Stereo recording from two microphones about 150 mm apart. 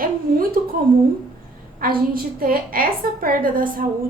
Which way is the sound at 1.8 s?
75° right (ahead or behind).